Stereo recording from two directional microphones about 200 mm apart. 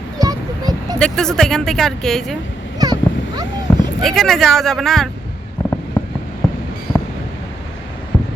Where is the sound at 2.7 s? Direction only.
20° right (ahead or behind).